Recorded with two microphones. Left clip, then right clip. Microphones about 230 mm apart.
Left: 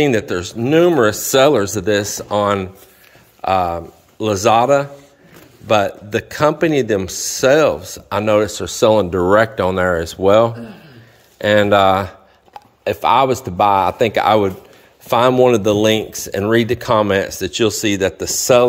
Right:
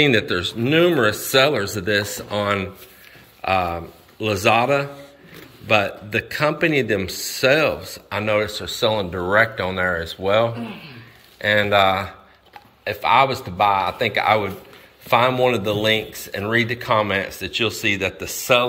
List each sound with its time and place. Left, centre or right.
0.0 s speech: left
17.9 s speech: left
18.4 s speech: left